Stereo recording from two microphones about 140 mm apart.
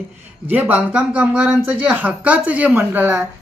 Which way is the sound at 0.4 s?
10° right (ahead or behind).